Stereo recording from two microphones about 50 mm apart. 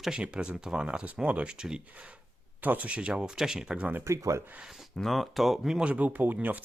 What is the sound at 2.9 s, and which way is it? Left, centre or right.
Speech, right.